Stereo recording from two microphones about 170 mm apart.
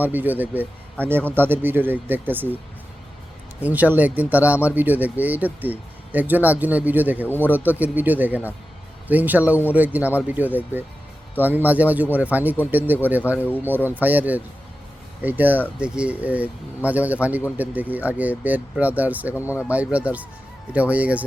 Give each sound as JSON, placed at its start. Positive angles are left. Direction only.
{"t": 0.0, "sound": "speech", "side_deg": -10}
{"t": 3.6, "sound": "speech", "side_deg": -10}